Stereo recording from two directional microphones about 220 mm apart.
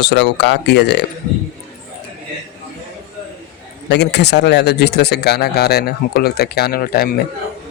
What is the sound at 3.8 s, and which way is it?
A man's voice, 50° left (ahead or behind).